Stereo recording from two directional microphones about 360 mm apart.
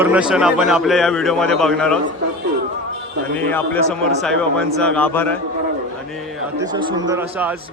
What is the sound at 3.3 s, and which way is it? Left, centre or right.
A man's voice, centre.